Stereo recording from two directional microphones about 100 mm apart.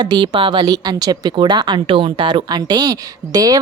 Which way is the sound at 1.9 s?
65° right (ahead or behind).